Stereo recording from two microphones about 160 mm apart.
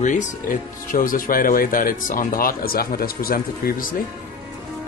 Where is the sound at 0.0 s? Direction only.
50° left (ahead or behind); by 3.7 s 70° left (ahead or behind).